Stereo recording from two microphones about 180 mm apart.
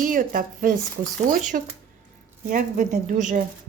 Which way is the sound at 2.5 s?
45° right (ahead or behind).